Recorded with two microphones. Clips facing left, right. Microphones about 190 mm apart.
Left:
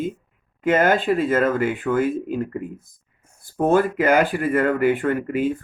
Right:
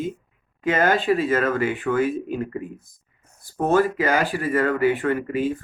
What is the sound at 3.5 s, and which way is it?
Speech, 55° left (ahead or behind).